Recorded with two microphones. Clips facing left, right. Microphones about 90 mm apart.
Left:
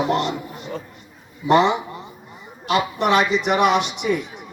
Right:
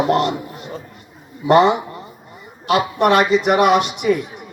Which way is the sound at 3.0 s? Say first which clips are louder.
Right 4 dB; 50° right (ahead or behind).